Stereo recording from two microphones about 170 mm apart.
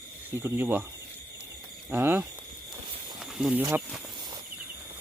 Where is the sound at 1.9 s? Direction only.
10° right (ahead or behind).